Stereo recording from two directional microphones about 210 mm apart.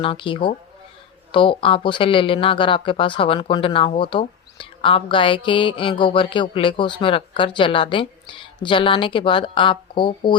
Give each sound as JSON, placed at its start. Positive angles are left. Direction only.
{"t": 0.0, "sound": "speech", "side_deg": 25}